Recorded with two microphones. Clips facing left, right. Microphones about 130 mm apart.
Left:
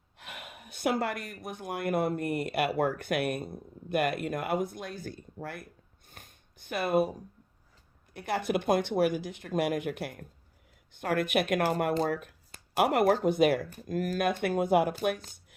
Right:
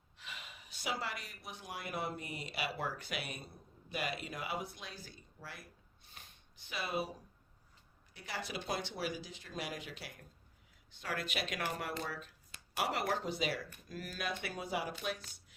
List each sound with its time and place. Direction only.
0.2 s speech: 55° left (ahead or behind)
6.1 s a sound: 50° left (ahead or behind)
8.1 s speech: 55° left (ahead or behind)